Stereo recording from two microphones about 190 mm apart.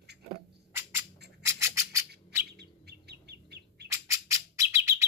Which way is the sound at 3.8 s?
15° right (ahead or behind).